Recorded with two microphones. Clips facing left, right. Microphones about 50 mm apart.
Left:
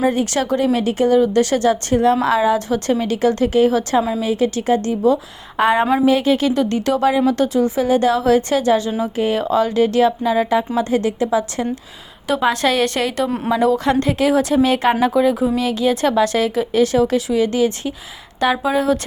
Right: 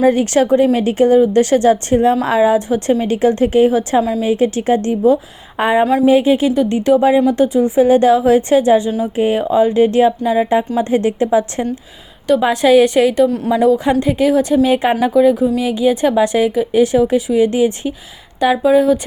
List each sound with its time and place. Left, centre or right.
0.0 s a woman's voice: right
2.6 s a woman's voice: right
5.5 s a woman's voice: centre
6.5 s speech: centre
7.8 s a woman's voice: right
10.2 s speech: centre
10.8 s a woman's voice: right
12.5 s speech: centre
13.2 s speech: centre
13.5 s a woman's voice: centre
18.3 s a woman's voice: centre